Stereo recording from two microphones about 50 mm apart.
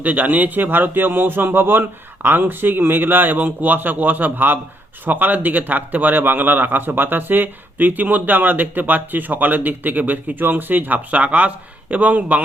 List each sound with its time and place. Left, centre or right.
0.0 s speech: right